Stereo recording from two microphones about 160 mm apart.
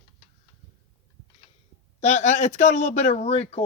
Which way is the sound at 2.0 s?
45° left (ahead or behind).